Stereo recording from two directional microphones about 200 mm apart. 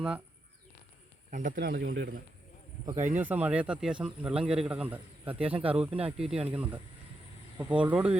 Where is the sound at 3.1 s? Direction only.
10° right (ahead or behind).